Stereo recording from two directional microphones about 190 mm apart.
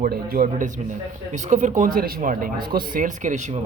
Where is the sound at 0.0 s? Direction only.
50° right (ahead or behind).